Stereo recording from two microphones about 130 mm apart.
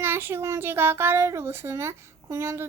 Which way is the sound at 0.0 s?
15° right (ahead or behind).